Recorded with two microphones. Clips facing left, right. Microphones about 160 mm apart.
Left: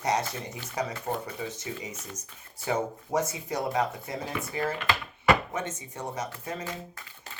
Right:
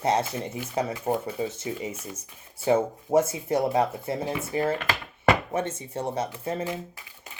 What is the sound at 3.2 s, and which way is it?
Speech, 25° right (ahead or behind).